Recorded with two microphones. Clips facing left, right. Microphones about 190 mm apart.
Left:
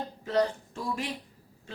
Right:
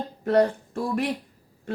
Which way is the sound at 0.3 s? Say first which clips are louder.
Right 7 dB; 55° right (ahead or behind).